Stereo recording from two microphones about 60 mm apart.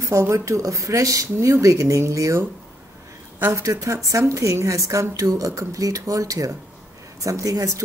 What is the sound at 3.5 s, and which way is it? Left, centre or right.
Speech, right.